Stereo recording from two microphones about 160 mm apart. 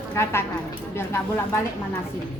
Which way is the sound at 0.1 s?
15° left (ahead or behind).